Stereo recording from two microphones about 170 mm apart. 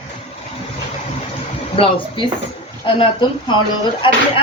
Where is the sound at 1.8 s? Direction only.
30° left (ahead or behind).